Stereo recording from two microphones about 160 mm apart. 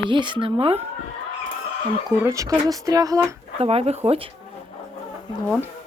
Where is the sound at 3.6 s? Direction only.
40° right (ahead or behind).